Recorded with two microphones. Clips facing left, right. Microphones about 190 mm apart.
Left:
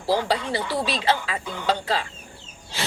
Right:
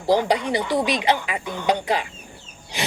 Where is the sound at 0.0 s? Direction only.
15° right (ahead or behind).